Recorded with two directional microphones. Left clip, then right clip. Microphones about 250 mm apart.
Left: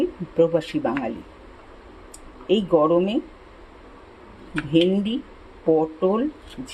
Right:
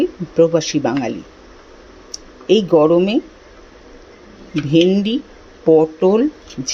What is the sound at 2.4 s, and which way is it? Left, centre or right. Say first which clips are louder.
Speech: right 6 dB; centre.